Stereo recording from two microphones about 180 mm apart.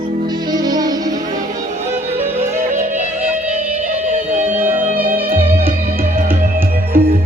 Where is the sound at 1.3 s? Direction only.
45° right (ahead or behind).